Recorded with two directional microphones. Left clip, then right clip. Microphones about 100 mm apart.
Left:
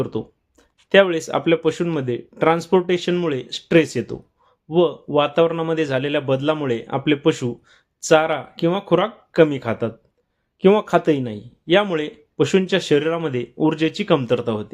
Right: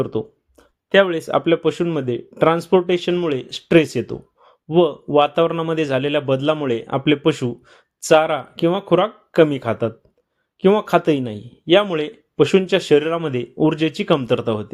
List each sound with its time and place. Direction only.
0.0 s a sound: 15° right (ahead or behind)
0.9 s speech: centre (ahead or behind)
1.2 s a man's voice: 20° right (ahead or behind)
10.6 s speech: centre (ahead or behind)
10.8 s a man's voice: 30° right (ahead or behind)